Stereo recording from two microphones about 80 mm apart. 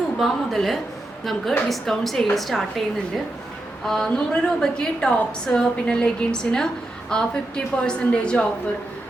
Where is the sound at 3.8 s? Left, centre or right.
Centre.